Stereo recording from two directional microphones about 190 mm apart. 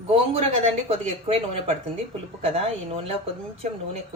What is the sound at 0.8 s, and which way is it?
Speech, 30° right (ahead or behind).